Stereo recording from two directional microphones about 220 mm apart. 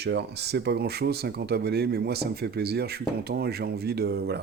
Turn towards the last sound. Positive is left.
turn(degrees=-45)  # may be behind; listen again after turning